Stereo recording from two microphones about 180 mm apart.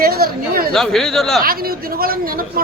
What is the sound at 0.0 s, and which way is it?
Chatter, 55° right (ahead or behind).